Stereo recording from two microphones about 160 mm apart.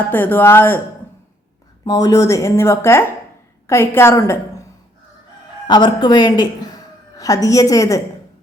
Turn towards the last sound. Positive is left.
turn(degrees=20)  # may be behind; listen again after turning